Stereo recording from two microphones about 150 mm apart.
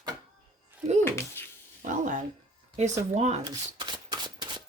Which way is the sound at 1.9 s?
55° right (ahead or behind).